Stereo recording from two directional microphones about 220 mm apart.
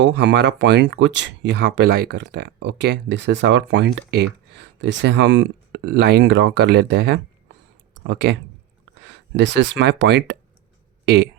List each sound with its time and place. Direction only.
0.0 s speech: 50° right (ahead or behind)